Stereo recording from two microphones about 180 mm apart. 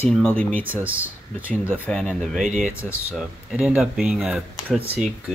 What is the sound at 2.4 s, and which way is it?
Speech, 45° right (ahead or behind).